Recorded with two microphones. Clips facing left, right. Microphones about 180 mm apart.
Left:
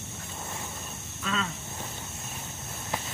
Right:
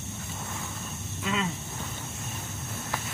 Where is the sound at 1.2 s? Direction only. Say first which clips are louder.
Right 2 dB; 15° right (ahead or behind).